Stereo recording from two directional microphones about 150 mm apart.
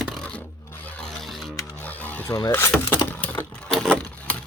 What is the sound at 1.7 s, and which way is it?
Mechanisms, 10° left (ahead or behind).